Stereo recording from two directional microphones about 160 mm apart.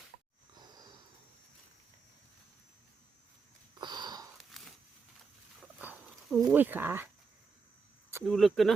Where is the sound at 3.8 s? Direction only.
25° right (ahead or behind).